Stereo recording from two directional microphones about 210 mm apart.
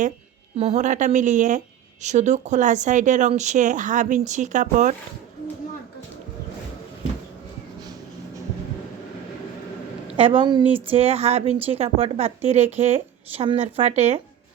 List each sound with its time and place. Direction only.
0.5 s a woman's voice: 30° right (ahead or behind)
10.1 s a woman's voice: 25° right (ahead or behind)